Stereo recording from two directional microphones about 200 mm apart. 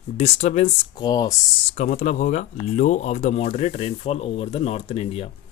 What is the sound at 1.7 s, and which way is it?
Speech, 35° left (ahead or behind).